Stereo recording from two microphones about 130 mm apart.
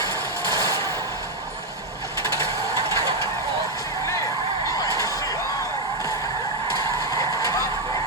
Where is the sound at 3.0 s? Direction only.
25° left (ahead or behind).